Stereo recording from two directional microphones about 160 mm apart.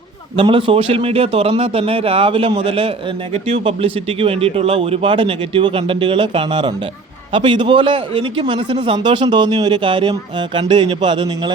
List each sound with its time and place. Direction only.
0.3 s speech: 30° right (ahead or behind)